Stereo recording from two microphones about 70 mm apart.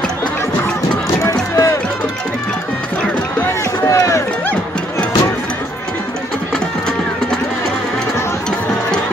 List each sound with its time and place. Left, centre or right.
1.2 s run: left
3.8 s run: left